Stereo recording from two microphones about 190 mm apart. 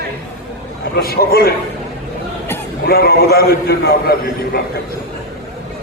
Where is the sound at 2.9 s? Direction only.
55° left (ahead or behind).